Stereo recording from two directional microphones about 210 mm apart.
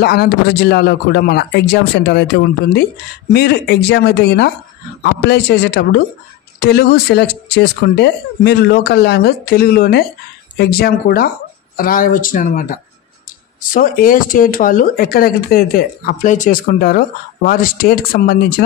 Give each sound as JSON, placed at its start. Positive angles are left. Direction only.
{"t": 0.0, "sound": "speech", "side_deg": 50}
{"t": 13.7, "sound": "speech", "side_deg": 40}